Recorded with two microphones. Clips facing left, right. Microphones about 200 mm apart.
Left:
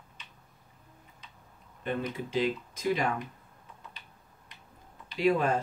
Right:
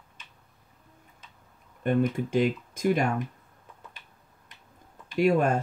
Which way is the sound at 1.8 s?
50° right (ahead or behind).